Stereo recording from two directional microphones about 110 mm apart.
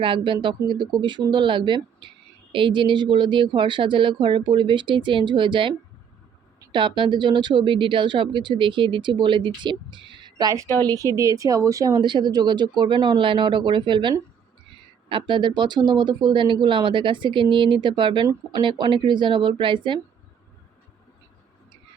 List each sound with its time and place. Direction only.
0.0 s a woman's voice: 50° right (ahead or behind)